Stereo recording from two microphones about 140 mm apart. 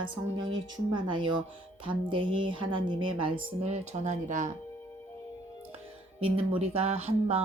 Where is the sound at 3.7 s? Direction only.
60° right (ahead or behind).